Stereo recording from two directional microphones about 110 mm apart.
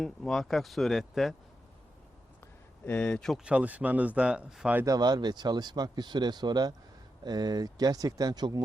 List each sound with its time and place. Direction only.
0.0 s speech: 5° left (ahead or behind)
2.9 s speech: 5° left (ahead or behind)
3.4 s speech: 10° right (ahead or behind)
4.9 s speech: 40° right (ahead or behind)